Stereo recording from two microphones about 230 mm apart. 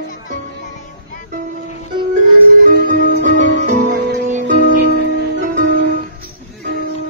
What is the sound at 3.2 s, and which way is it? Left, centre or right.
Music, right.